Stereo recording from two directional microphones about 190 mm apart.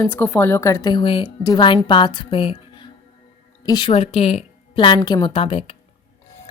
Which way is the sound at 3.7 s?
25° left (ahead or behind).